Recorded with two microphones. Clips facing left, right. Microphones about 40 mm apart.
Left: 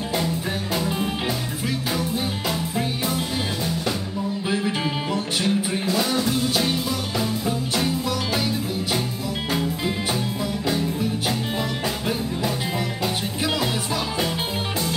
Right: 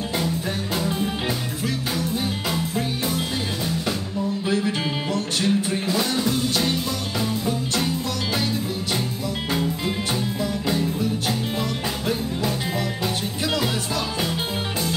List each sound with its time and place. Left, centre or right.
5.1 s music: centre
9.5 s music: centre